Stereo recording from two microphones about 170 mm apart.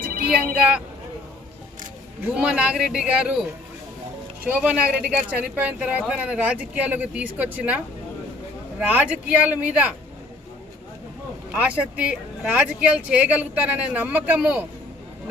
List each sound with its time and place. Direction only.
0.0 s vehicle: 60° right (ahead or behind)
0.3 s speech: 5° right (ahead or behind)
2.2 s a man's voice: 5° right (ahead or behind)
4.4 s speech: 5° right (ahead or behind)
8.8 s speech: 10° right (ahead or behind)
11.5 s speech: 10° right (ahead or behind)